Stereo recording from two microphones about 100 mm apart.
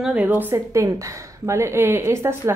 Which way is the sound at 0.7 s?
30° right (ahead or behind).